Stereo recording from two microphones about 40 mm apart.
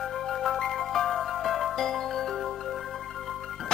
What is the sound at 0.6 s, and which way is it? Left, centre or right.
Music, centre.